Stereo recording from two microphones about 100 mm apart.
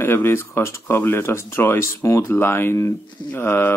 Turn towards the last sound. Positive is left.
turn(degrees=20)  # may be behind; listen again after turning